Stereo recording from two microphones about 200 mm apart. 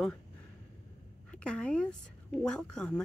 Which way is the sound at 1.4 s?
5° left (ahead or behind).